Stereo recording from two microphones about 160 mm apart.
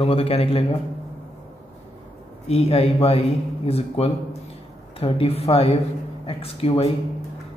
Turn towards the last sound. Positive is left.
turn(degrees=40)  # may be behind; listen again after turning